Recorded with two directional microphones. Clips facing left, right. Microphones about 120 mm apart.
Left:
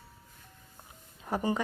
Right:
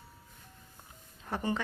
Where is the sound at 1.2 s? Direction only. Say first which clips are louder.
Left 3 dB; 10° left (ahead or behind).